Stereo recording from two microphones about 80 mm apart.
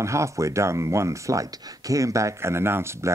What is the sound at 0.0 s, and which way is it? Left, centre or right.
Speech, right.